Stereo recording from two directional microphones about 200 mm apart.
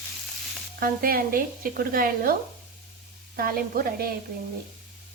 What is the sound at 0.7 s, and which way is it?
Speech, 45° right (ahead or behind).